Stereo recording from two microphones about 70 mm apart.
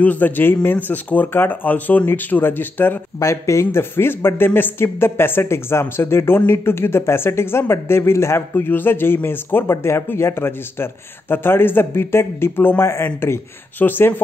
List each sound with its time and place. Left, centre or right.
0.0 s speech: left
3.2 s speech: left